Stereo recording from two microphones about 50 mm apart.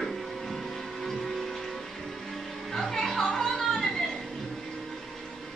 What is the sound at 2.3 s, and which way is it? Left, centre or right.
Music, centre.